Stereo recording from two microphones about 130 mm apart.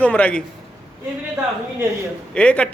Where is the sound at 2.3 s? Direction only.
10° left (ahead or behind).